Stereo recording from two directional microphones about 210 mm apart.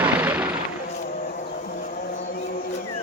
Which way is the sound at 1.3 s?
40° left (ahead or behind).